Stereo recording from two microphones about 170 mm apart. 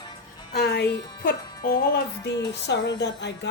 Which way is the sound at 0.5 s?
70° left (ahead or behind).